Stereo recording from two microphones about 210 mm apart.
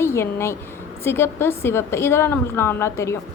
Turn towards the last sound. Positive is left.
turn(degrees=15)  # may be behind; listen again after turning